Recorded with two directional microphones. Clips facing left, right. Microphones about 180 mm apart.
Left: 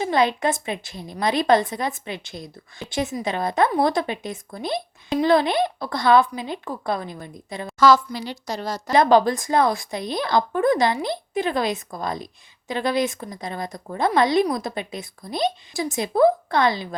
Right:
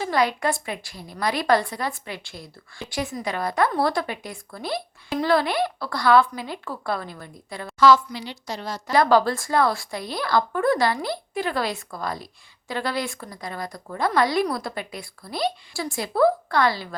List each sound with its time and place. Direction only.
0.0 s speech: 25° left (ahead or behind)
7.8 s a woman's voice: 40° left (ahead or behind)
8.9 s speech: 20° left (ahead or behind)